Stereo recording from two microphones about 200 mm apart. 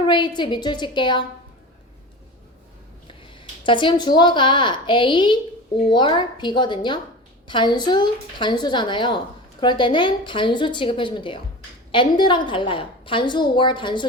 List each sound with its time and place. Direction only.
0.0 s a woman's voice: 25° left (ahead or behind)
3.2 s a woman's voice: 25° left (ahead or behind)